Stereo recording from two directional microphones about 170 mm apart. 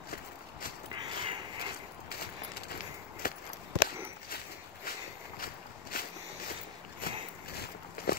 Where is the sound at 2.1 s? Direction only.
65° left (ahead or behind).